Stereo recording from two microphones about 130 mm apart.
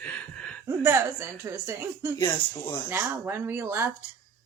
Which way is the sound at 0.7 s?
15° right (ahead or behind).